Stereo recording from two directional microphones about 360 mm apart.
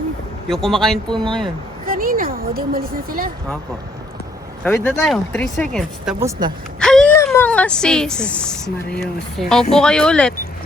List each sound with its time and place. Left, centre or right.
0.4 s speech: centre
1.1 s speech: centre
1.9 s speech: right
4.6 s speech: centre